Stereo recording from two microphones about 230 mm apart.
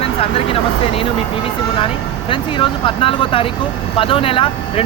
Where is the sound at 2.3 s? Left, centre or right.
Left.